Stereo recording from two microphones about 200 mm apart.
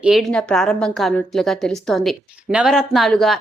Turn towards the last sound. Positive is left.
turn(degrees=0)  # may be behind; listen again after turning